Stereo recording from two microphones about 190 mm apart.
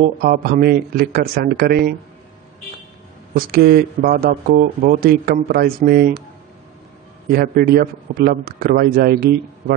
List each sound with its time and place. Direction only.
0.0 s a man's voice: 50° right (ahead or behind)
3.3 s a man's voice: 55° right (ahead or behind)
7.2 s a man's voice: 55° right (ahead or behind)